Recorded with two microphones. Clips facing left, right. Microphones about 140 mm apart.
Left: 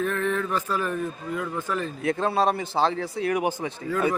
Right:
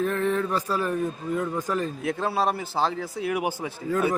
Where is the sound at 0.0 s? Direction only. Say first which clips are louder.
Right 1 dB; 35° right (ahead or behind).